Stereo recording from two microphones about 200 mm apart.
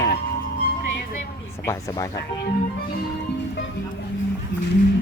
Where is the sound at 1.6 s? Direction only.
15° left (ahead or behind).